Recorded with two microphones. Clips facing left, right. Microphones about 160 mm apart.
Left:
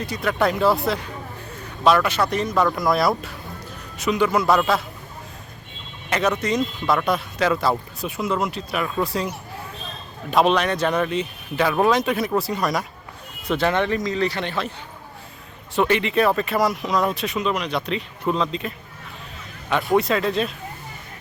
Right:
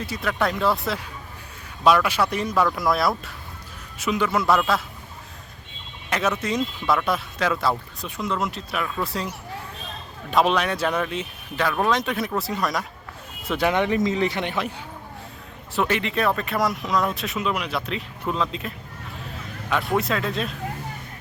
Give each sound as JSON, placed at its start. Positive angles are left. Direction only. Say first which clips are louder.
{"t": 0.0, "sound": "speech", "louder": "left 3 dB", "side_deg": -5}
{"t": 6.1, "sound": "emergency vehicle", "louder": "left 3 dB", "side_deg": 0}
{"t": 6.4, "sound": "speech", "louder": "left 3 dB", "side_deg": -5}
{"t": 10.3, "sound": "speech", "louder": "left 2 dB", "side_deg": 0}
{"t": 13.5, "sound": "speech", "louder": "left 1 dB", "side_deg": -10}
{"t": 15.7, "sound": "speech", "louder": "left 4 dB", "side_deg": 0}
{"t": 19.7, "sound": "speech", "louder": "left 4 dB", "side_deg": 0}